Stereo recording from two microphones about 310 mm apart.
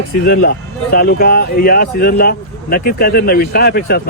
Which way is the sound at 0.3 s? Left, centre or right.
Left.